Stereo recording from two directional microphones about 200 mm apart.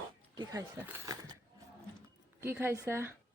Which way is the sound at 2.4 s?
10° right (ahead or behind).